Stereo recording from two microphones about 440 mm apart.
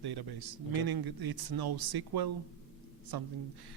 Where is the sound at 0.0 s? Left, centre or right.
Right.